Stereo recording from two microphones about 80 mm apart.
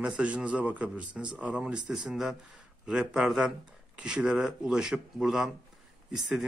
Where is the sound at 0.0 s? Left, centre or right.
Centre.